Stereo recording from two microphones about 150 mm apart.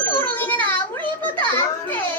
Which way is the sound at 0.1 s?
10° left (ahead or behind).